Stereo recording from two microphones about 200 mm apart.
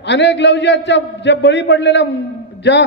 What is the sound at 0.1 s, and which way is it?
A man's voice, 60° left (ahead or behind).